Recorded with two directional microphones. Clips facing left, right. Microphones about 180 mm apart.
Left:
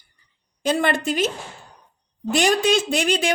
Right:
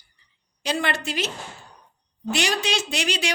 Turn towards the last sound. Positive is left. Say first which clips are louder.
# left 6 dB
turn(degrees=50)  # may be behind; listen again after turning